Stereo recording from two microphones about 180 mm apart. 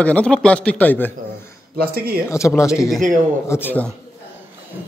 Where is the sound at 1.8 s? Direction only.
55° right (ahead or behind).